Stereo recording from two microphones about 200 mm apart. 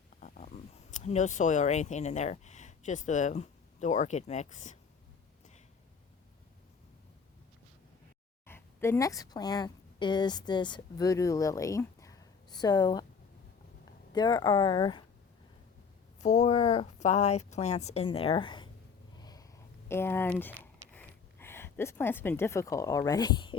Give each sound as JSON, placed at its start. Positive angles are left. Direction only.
{"t": 0.2, "sound": "speech", "side_deg": 40}
{"t": 8.4, "sound": "a woman's voice", "side_deg": 10}
{"t": 14.1, "sound": "speech", "side_deg": 20}
{"t": 16.2, "sound": "a woman's voice", "side_deg": 35}
{"t": 19.1, "sound": "a sound", "side_deg": 20}
{"t": 19.9, "sound": "speech", "side_deg": 10}